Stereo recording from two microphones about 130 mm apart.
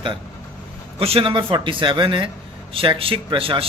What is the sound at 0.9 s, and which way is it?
Speech, 50° right (ahead or behind).